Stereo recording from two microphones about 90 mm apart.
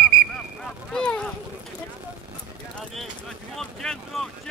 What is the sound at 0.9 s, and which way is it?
Speech, 10° left (ahead or behind).